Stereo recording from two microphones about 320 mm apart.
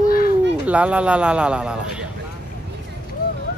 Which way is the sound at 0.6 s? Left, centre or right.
Centre.